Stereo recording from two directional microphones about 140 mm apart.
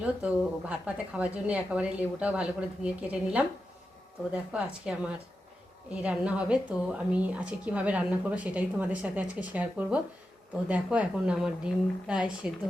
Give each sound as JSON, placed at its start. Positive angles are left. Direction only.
{"t": 0.7, "sound": "a woman's voice", "side_deg": -10}